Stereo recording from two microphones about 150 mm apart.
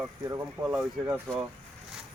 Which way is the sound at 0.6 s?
20° right (ahead or behind).